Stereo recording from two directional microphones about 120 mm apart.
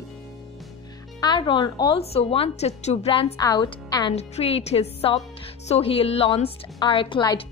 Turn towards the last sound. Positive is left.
turn(degrees=40)  # may be behind; listen again after turning